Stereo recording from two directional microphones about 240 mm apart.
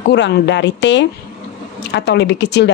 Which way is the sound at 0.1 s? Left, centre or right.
Left.